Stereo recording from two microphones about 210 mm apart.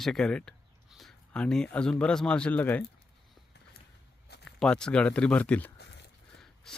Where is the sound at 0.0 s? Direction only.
Centre (ahead or behind).